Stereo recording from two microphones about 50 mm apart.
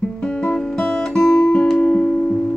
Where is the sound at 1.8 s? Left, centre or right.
Left.